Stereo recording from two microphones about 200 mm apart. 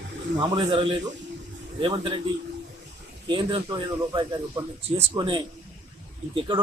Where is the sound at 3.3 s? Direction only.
20° right (ahead or behind).